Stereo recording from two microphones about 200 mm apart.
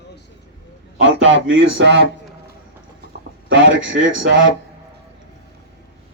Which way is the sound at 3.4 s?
70° right (ahead or behind).